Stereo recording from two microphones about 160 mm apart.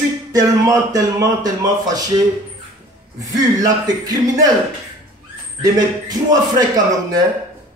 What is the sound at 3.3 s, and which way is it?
A man's voice, 25° right (ahead or behind).